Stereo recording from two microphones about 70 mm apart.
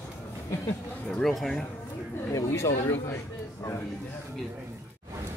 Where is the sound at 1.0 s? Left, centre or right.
Centre.